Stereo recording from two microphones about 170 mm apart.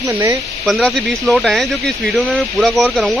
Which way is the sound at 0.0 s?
20° right (ahead or behind).